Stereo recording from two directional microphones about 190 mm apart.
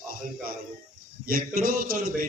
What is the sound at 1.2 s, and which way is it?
A man's voice, 50° right (ahead or behind).